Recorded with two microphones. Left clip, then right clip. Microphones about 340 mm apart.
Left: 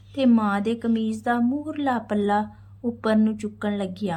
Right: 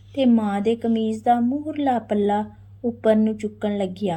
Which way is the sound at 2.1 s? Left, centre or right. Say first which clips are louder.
Right 2 dB; left.